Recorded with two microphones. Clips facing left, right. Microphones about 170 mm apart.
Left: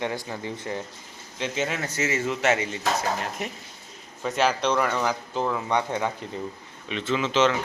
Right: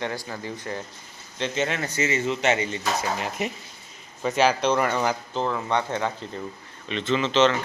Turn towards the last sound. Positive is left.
turn(degrees=10)  # may be behind; listen again after turning